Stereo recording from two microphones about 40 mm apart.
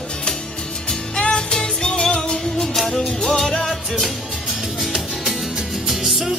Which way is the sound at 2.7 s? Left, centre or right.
Centre.